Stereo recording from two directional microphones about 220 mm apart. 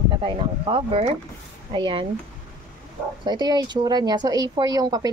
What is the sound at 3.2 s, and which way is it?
Speech, 20° right (ahead or behind).